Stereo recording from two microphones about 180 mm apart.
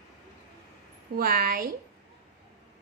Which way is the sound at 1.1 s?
55° right (ahead or behind).